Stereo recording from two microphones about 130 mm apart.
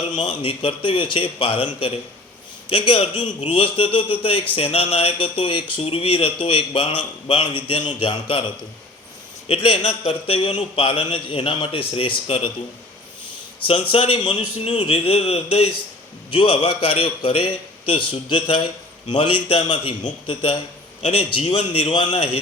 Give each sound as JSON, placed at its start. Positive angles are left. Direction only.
{"t": 0.1, "sound": "a man's voice", "side_deg": 35}
{"t": 2.6, "sound": "a man's voice", "side_deg": 45}
{"t": 13.6, "sound": "speech", "side_deg": 40}
{"t": 16.3, "sound": "a man's voice", "side_deg": 40}
{"t": 21.0, "sound": "speech", "side_deg": 50}